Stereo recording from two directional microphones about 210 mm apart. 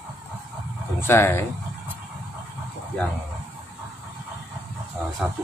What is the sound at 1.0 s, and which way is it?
Speech, 10° left (ahead or behind).